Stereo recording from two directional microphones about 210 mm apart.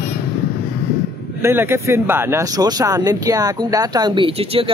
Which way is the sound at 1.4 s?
10° right (ahead or behind).